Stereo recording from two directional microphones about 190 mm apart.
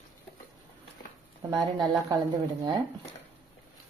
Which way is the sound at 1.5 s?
20° right (ahead or behind).